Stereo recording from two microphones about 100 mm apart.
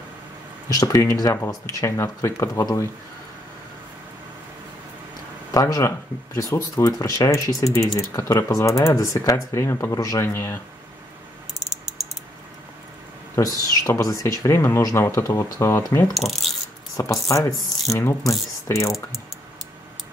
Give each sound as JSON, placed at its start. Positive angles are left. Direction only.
{"t": 0.7, "sound": "speech", "side_deg": 35}
{"t": 5.5, "sound": "speech", "side_deg": 35}
{"t": 13.4, "sound": "speech", "side_deg": 35}
{"t": 16.1, "sound": "a sound", "side_deg": 0}
{"t": 16.9, "sound": "speech", "side_deg": 35}